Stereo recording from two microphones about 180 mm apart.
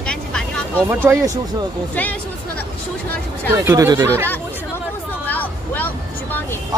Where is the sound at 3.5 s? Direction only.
15° right (ahead or behind).